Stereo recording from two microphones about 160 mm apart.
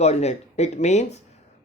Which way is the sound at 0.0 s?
40° left (ahead or behind).